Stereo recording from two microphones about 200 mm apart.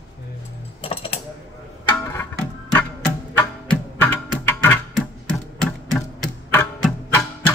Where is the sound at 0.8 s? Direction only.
30° left (ahead or behind).